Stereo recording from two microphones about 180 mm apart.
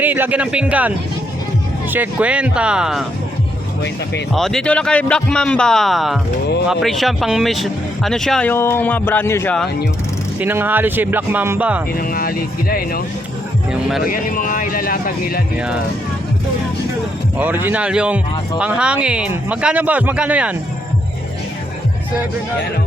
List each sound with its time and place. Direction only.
0.0 s a man's voice: 10° right (ahead or behind)
4.3 s speech: centre (ahead or behind)
10.4 s a man's voice: 10° right (ahead or behind)
11.9 s speech: 55° left (ahead or behind)
13.7 s speech: 5° right (ahead or behind)
14.1 s speech: 50° left (ahead or behind)
15.5 s speech: 5° right (ahead or behind)
17.3 s a man's voice: 10° right (ahead or behind)